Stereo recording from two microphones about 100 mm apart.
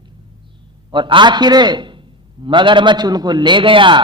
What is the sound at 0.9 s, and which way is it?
A man's voice, 55° right (ahead or behind).